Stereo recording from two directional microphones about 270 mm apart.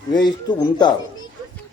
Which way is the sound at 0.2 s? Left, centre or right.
Centre.